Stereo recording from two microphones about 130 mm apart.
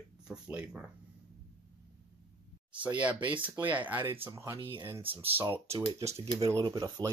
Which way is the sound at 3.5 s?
10° right (ahead or behind).